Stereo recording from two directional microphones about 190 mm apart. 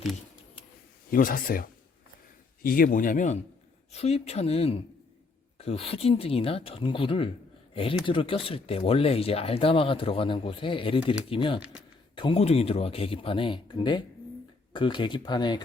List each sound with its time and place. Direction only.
1.1 s speech: 50° left (ahead or behind); by 15.6 s 25° left (ahead or behind)